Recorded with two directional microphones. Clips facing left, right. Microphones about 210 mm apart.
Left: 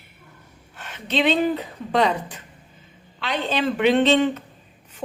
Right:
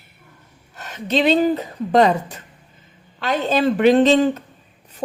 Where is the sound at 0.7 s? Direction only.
40° right (ahead or behind).